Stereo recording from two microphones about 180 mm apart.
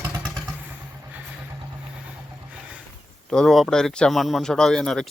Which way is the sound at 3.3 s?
5° left (ahead or behind).